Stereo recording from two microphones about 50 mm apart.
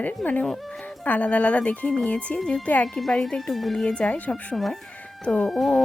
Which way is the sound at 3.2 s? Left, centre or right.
Centre.